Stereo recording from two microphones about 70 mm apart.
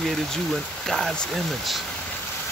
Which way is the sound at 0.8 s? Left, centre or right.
Centre.